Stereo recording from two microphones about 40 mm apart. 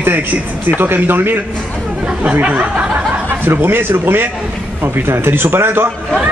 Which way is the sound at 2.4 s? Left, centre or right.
Right.